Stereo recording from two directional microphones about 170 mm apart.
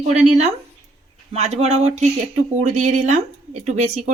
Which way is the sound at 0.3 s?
40° right (ahead or behind).